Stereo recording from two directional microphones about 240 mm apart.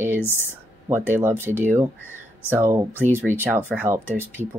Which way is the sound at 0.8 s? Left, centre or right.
Centre.